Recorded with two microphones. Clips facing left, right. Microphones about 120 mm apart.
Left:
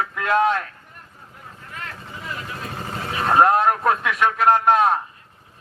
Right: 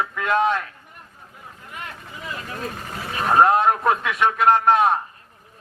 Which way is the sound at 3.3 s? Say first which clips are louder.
Even; centre (ahead or behind).